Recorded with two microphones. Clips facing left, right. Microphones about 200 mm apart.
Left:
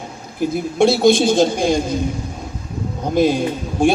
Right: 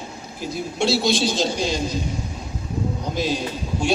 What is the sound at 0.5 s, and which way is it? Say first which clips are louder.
A man's voice: left 6 dB; 55° left (ahead or behind).